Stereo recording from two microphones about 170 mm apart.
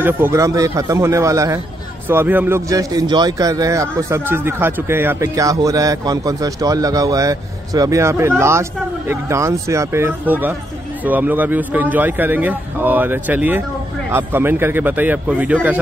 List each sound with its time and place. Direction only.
0.0 s speech: 15° right (ahead or behind)